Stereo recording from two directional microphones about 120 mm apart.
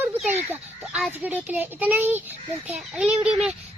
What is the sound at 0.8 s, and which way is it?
Speech, 5° right (ahead or behind).